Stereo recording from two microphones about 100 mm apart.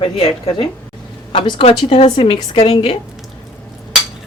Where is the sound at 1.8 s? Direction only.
85° left.